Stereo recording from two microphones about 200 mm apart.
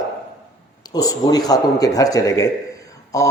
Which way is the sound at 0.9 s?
20° left (ahead or behind).